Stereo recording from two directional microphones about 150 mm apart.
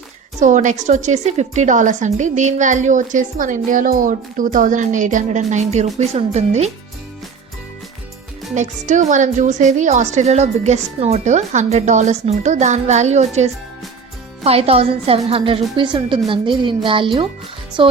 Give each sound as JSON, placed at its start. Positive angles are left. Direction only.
{"t": 0.3, "sound": "a woman's voice", "side_deg": -55}
{"t": 8.5, "sound": "a woman's voice", "side_deg": -55}